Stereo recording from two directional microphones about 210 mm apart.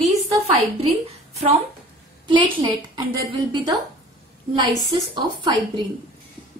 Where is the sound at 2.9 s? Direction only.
20° right (ahead or behind).